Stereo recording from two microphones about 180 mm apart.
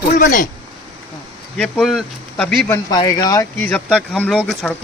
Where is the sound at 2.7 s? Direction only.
20° left (ahead or behind).